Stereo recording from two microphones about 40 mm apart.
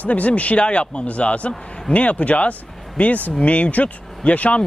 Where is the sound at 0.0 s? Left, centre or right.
Left.